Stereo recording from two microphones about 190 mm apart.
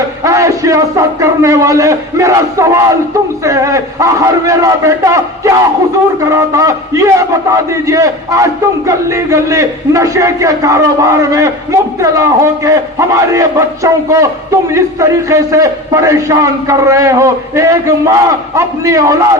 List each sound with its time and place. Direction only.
0.3 s a man's voice: 15° right (ahead or behind)